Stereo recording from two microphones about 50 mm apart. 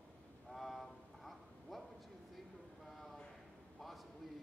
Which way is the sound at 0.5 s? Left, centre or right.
Centre.